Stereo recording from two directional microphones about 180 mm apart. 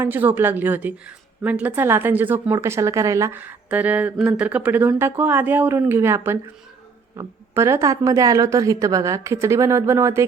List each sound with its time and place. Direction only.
0.0 s speech: 10° right (ahead or behind)